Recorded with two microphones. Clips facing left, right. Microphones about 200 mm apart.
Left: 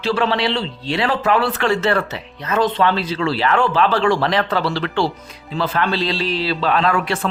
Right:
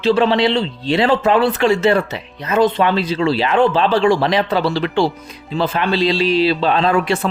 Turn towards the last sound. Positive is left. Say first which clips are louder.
# right 3 dB
turn(degrees=-25)  # may be behind; listen again after turning